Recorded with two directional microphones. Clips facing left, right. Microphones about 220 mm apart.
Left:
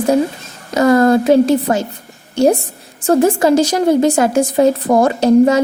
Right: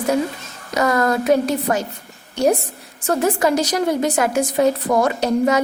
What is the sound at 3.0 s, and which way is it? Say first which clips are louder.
A woman's voice: left 6 dB; 30° left (ahead or behind).